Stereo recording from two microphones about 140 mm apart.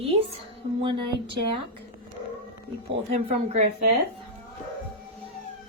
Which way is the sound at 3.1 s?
50° right (ahead or behind).